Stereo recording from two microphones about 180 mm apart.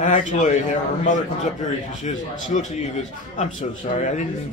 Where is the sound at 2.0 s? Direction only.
40° left (ahead or behind).